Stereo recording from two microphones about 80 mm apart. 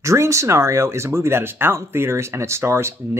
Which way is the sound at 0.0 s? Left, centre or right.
Right.